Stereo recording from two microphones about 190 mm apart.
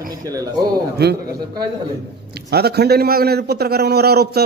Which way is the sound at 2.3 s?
55° right (ahead or behind).